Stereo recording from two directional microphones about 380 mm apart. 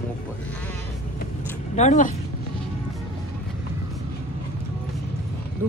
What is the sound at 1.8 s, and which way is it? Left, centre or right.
Speech, centre.